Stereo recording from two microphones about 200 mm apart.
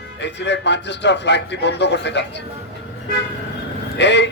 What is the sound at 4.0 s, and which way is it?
Speech, 60° left (ahead or behind).